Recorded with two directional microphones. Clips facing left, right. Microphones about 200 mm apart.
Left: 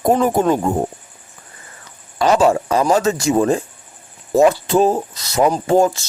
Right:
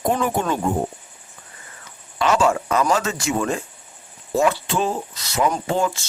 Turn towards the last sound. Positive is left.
turn(degrees=40)  # may be behind; listen again after turning